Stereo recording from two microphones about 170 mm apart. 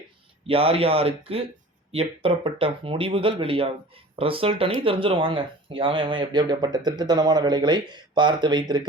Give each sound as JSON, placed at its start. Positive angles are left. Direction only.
{"t": 0.4, "sound": "speech", "side_deg": -35}